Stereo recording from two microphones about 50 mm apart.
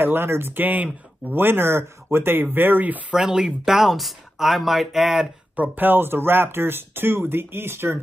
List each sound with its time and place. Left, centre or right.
0.0 s speech: right
1.3 s speech: right
3.2 s speech: centre
5.6 s speech: right